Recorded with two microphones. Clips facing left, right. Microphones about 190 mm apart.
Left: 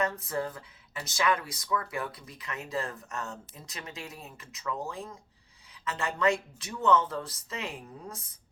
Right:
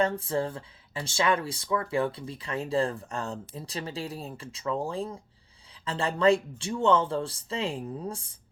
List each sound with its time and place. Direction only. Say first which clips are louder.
0.0 s speech: right 4 dB; 30° right (ahead or behind)